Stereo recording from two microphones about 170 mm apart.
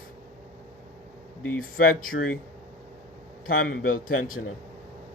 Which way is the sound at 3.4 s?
55° left (ahead or behind).